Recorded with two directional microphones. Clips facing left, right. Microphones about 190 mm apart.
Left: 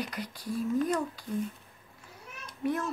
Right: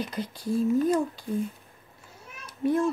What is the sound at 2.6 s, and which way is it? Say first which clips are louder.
Speech: right 7 dB; 30° right (ahead or behind).